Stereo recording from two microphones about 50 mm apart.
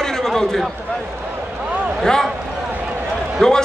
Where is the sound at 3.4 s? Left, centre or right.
Centre.